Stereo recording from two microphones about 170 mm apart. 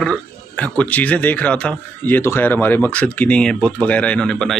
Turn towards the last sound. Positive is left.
turn(degrees=5)  # may be behind; listen again after turning